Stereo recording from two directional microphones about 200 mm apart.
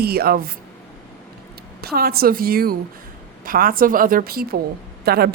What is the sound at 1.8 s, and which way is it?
A woman's voice, 50° right (ahead or behind).